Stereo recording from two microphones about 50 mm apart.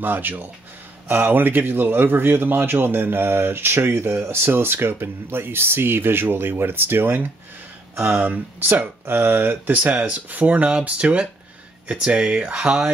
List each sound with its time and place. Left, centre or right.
0.0 s a man's voice: right
7.9 s speech: centre
8.2 s a man's voice: right
9.8 s speech: right